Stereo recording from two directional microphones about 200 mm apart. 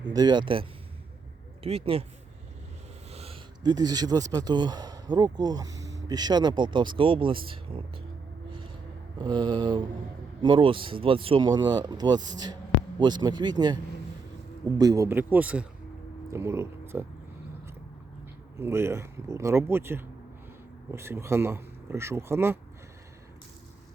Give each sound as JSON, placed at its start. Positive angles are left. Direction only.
{"t": 0.0, "sound": "speech", "side_deg": -20}
{"t": 1.6, "sound": "speech", "side_deg": -30}
{"t": 3.1, "sound": "speech", "side_deg": -30}
{"t": 8.4, "sound": "music", "side_deg": -25}
{"t": 9.1, "sound": "speech", "side_deg": -25}
{"t": 14.8, "sound": "speech", "side_deg": -15}
{"t": 18.5, "sound": "speech", "side_deg": -15}